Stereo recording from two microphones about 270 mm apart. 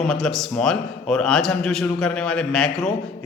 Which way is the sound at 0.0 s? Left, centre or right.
Centre.